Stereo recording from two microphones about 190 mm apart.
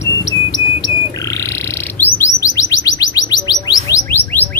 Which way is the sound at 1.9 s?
10° left (ahead or behind).